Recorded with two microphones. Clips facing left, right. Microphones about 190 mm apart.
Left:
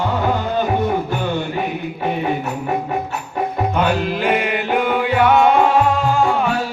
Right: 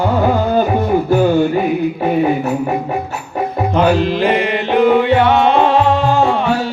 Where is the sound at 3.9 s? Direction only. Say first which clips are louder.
Right 4 dB; 5° left (ahead or behind).